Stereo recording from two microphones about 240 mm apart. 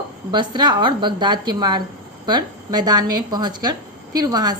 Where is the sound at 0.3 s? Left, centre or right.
Centre.